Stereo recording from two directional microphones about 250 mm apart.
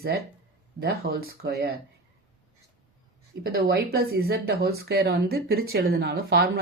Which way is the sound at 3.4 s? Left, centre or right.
Right.